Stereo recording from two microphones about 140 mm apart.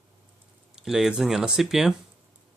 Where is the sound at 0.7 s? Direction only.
5° right (ahead or behind).